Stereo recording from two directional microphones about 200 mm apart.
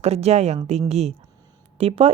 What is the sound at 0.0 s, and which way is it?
A woman's voice, 30° right (ahead or behind).